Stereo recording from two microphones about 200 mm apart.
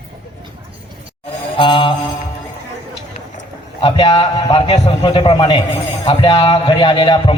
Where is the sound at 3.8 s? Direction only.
25° left (ahead or behind).